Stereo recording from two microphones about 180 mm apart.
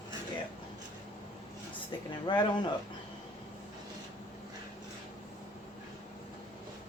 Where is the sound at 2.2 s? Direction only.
25° left (ahead or behind).